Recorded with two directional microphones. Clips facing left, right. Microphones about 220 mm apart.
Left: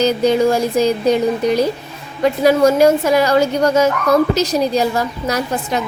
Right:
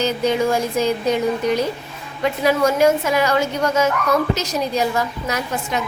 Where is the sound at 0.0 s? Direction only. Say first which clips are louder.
Left 5 dB; 35° left (ahead or behind).